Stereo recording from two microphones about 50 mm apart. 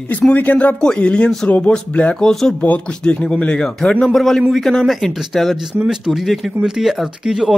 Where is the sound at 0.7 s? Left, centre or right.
Centre.